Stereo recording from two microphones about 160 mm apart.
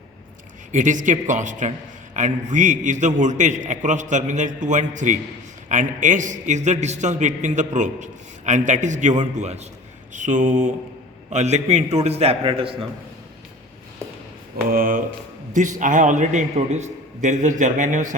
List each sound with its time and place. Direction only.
0.7 s a man's voice: 50° right (ahead or behind)
10.1 s mantra: 50° right (ahead or behind)
11.3 s a man's voice: 45° right (ahead or behind)
14.7 s a man's voice: 60° right (ahead or behind)